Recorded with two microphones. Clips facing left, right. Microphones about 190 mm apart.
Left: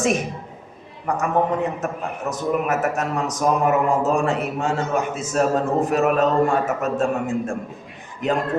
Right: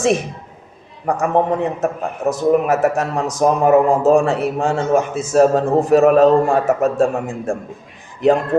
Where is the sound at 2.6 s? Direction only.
30° right (ahead or behind).